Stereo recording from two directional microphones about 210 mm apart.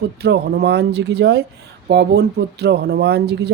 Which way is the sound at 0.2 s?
50° right (ahead or behind).